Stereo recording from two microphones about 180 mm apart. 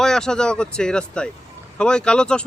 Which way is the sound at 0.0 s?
5° left (ahead or behind).